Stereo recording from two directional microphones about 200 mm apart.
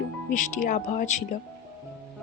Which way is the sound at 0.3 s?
40° left (ahead or behind).